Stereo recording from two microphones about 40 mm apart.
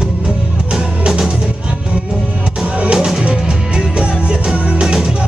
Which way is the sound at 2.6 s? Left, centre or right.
Right.